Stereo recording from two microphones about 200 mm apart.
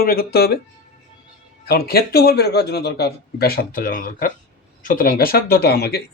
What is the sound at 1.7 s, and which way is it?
Speech, 50° left (ahead or behind).